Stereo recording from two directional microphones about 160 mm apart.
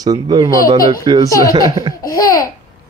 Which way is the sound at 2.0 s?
20° left (ahead or behind).